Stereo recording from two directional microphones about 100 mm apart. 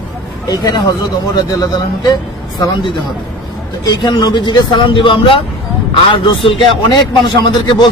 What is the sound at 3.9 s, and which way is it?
Speech, 45° left (ahead or behind).